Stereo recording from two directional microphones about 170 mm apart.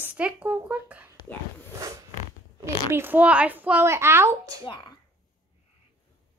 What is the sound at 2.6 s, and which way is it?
A child's voice, 15° right (ahead or behind).